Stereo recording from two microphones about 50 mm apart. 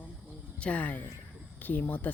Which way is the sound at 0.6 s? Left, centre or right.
Left.